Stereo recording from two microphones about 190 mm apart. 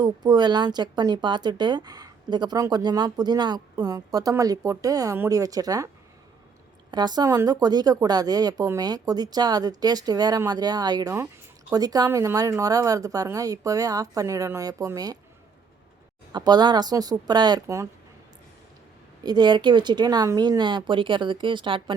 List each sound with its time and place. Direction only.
0.0 s speech: 20° right (ahead or behind)
6.9 s a woman's voice: 20° right (ahead or behind)
16.3 s speech: 20° right (ahead or behind)
19.2 s speech: 20° right (ahead or behind)